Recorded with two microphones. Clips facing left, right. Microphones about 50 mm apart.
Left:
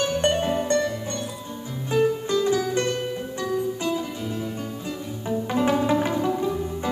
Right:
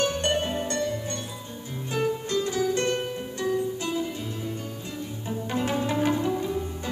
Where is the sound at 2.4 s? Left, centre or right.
Left.